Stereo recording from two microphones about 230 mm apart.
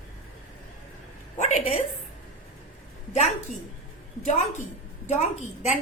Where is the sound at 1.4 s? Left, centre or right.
Left.